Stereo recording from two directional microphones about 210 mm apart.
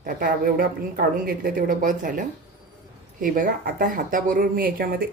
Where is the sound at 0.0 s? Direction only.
45° right (ahead or behind).